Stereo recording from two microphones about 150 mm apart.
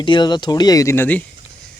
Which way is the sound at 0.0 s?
30° left (ahead or behind).